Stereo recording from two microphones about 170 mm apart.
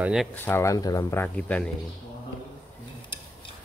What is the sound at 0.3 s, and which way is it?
Speech, 10° left (ahead or behind).